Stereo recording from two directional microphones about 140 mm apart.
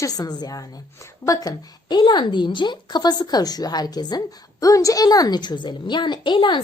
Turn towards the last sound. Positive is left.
turn(degrees=35)  # may be behind; listen again after turning